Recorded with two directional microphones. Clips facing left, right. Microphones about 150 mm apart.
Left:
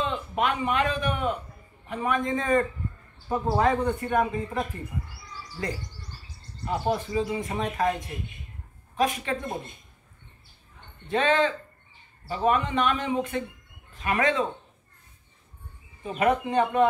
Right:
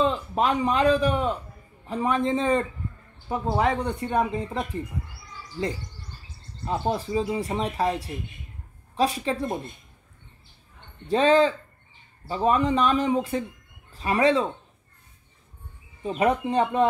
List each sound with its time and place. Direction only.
0.0 s a man's voice: 35° right (ahead or behind)
3.3 s speech: 15° right (ahead or behind)
4.1 s a man's voice: 25° right (ahead or behind)
6.6 s speech: 25° right (ahead or behind)
11.1 s speech: 35° right (ahead or behind)
16.0 s speech: 30° right (ahead or behind)